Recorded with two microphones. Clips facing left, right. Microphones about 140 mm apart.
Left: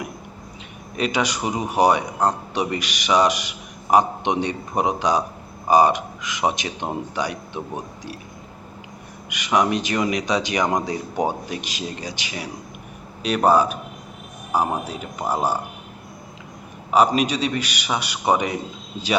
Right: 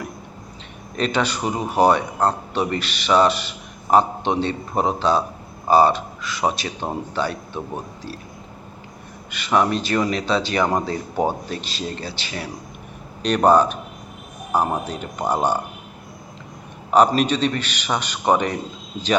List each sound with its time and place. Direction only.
0.9 s a man's voice: 10° left (ahead or behind)
9.3 s a man's voice: 15° left (ahead or behind)
16.9 s a man's voice: 5° left (ahead or behind)